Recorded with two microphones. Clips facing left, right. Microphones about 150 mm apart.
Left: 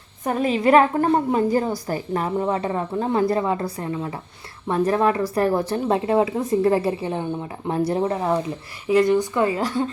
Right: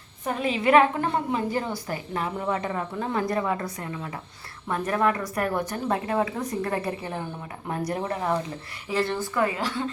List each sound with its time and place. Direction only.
0.3 s a woman's voice: 40° left (ahead or behind); by 9.5 s 20° left (ahead or behind)
9.6 s a woman's voice: 40° left (ahead or behind)